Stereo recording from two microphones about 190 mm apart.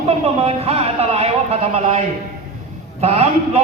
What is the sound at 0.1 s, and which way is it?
A man's voice, 30° right (ahead or behind).